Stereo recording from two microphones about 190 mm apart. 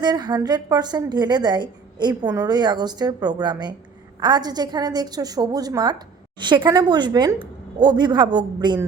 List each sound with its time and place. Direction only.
0.0 s a woman's voice: 20° right (ahead or behind)